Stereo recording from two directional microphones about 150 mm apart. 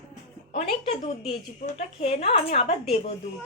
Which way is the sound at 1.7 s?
45° left (ahead or behind).